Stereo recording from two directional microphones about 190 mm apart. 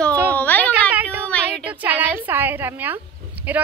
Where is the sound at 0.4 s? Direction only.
10° left (ahead or behind).